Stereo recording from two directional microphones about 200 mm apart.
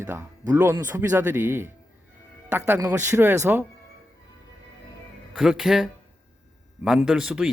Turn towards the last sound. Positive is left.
turn(degrees=-5)  # may be behind; listen again after turning